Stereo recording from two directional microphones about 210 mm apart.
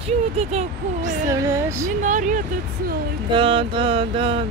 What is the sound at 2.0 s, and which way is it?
Speech, 35° right (ahead or behind).